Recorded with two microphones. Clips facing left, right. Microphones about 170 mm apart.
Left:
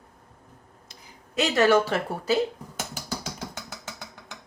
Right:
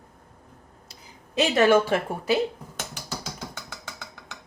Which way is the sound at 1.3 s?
20° right (ahead or behind).